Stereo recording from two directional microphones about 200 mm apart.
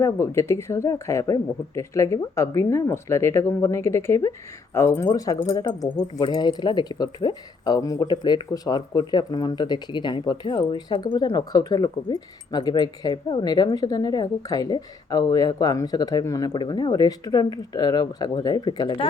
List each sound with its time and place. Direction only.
0.0 s speech: 15° left (ahead or behind)